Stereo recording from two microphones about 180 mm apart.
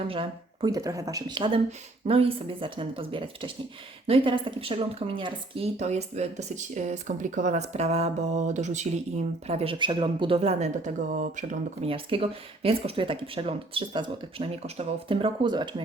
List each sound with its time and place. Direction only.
0.1 s a woman's voice: 25° right (ahead or behind)
11.1 s speech: 50° right (ahead or behind)
11.8 s speech: 30° right (ahead or behind)